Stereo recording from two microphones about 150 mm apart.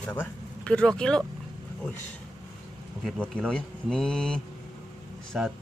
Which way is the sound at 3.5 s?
5° left (ahead or behind).